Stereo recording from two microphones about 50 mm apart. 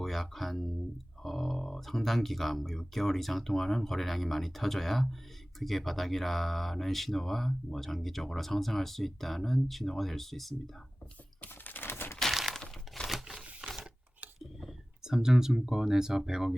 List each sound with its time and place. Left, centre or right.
0.0 s speech: centre
11.6 s a sound: left
12.3 s breaking: centre
13.1 s typewriter: centre
14.3 s speech: centre